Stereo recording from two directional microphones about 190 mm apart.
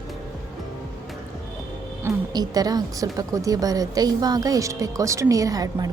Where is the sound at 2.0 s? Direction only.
20° right (ahead or behind).